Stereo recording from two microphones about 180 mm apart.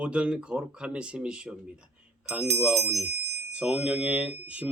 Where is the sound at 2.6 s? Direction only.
5° right (ahead or behind).